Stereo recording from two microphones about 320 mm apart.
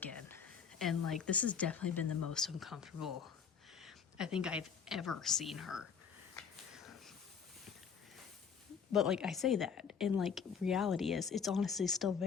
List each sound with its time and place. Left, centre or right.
0.0 s a woman's voice: centre
6.3 s finger snapping: centre
8.9 s speech: centre